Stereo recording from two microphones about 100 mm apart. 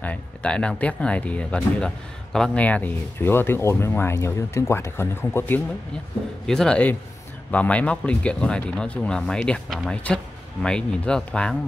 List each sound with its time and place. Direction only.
0.0 s speech: 10° left (ahead or behind)
6.4 s speech: 5° left (ahead or behind)